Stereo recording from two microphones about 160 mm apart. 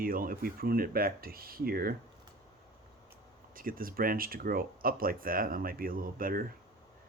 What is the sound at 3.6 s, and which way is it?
Speech, 60° right (ahead or behind).